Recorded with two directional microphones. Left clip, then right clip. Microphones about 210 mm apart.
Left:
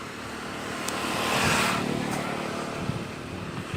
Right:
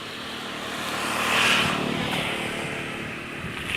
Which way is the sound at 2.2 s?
20° right (ahead or behind).